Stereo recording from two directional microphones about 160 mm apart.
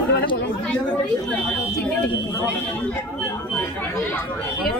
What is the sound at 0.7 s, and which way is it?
Speech, 5° left (ahead or behind).